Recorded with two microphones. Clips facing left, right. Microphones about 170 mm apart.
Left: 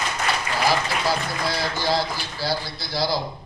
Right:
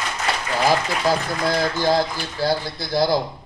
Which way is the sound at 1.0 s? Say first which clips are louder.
Right 4 dB; 50° right (ahead or behind).